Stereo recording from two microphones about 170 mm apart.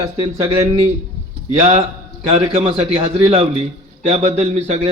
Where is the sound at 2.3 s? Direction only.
35° right (ahead or behind).